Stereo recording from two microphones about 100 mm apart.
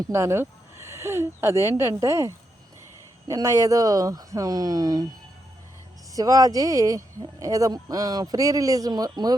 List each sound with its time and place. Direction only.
0.1 s speech: 25° right (ahead or behind)
6.1 s speech: 35° right (ahead or behind)